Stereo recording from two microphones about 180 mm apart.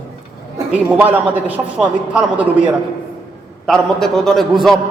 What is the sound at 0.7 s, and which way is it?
A man's voice, 10° right (ahead or behind).